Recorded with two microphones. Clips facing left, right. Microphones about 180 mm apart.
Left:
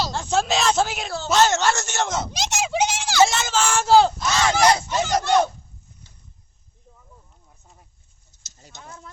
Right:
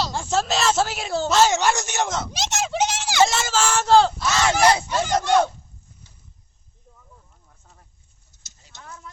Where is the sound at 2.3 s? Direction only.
Centre (ahead or behind).